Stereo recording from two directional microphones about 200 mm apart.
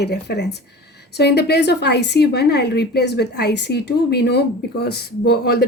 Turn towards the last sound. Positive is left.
turn(degrees=55)  # may be behind; listen again after turning